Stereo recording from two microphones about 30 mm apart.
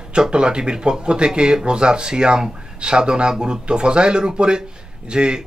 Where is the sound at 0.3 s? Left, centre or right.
Right.